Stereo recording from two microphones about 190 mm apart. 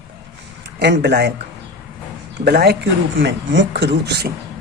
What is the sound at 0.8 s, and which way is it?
Speech, 60° right (ahead or behind).